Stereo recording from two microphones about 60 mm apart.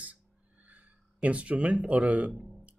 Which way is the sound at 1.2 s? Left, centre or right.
Right.